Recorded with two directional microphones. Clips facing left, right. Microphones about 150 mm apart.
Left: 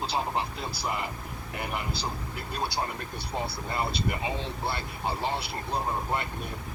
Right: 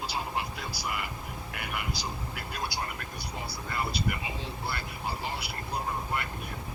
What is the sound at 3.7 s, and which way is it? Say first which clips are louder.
Speech: left 1 dB; 25° left (ahead or behind).